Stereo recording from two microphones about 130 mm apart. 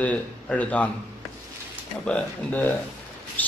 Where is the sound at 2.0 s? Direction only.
10° left (ahead or behind).